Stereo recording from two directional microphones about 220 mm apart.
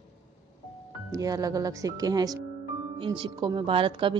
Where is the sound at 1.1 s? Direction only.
15° right (ahead or behind).